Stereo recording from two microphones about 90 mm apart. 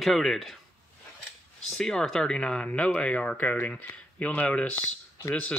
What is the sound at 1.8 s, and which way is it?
Speech, 10° left (ahead or behind).